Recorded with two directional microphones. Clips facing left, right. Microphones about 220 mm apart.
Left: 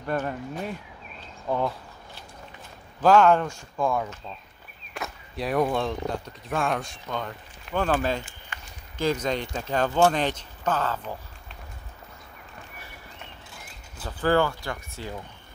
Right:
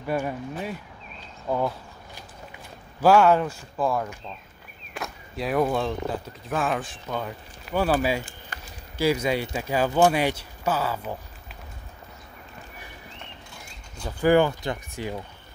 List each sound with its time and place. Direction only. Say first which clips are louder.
0.0 s speech: right 1 dB; 10° right (ahead or behind)
3.0 s speech: right 1 dB; 10° right (ahead or behind)
8.5 s a sound: right 1 dB; 35° right (ahead or behind)
8.9 s speech: right 3 dB; 10° right (ahead or behind)
14.0 s speech: right 3 dB; 15° right (ahead or behind)